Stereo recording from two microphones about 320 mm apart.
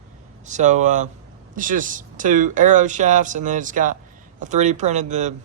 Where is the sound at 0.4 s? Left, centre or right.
Right.